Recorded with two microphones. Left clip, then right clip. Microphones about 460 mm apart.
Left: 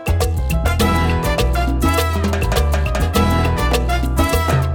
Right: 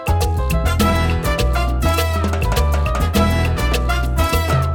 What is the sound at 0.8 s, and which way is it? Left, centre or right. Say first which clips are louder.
Music: left 2 dB; left.